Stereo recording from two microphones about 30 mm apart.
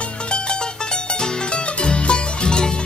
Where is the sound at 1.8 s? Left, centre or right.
Left.